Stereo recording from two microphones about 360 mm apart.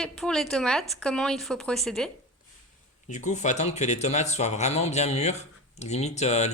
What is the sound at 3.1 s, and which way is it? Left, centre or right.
Speech, centre.